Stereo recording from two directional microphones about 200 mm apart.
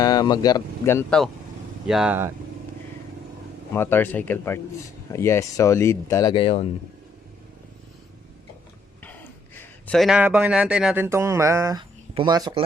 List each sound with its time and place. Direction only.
0.0 s speech: 20° left (ahead or behind)
1.9 s speech: 5° right (ahead or behind)
3.8 s speech: 10° left (ahead or behind); by 6.7 s 25° left (ahead or behind)
9.6 s a man's voice: 5° left (ahead or behind); by 12.6 s 20° right (ahead or behind)